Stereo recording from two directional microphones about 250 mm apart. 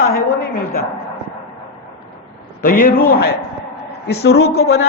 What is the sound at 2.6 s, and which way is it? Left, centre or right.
A man's voice, left.